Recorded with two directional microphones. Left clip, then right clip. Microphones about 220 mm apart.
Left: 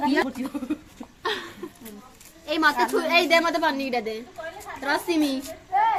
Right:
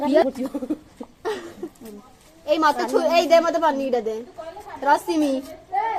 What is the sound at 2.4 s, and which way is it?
A woman's voice, 10° left (ahead or behind).